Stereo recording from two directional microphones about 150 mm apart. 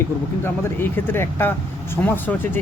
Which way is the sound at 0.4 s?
15° left (ahead or behind).